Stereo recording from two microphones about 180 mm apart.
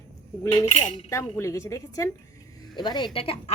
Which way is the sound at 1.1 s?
15° left (ahead or behind).